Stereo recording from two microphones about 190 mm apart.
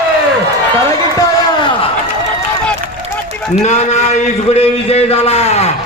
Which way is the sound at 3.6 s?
35° left (ahead or behind).